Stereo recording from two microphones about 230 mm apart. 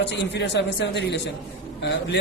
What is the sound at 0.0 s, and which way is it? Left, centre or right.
Speech, left.